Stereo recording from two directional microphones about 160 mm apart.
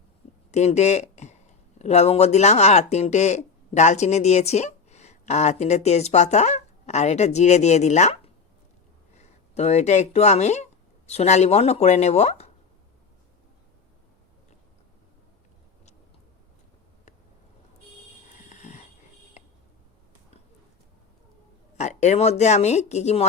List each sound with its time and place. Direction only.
0.5 s speech: 45° left (ahead or behind)
18.4 s a sound: 45° left (ahead or behind)
21.8 s speech: 45° left (ahead or behind)